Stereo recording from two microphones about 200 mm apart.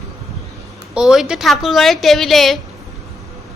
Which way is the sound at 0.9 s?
5° right (ahead or behind).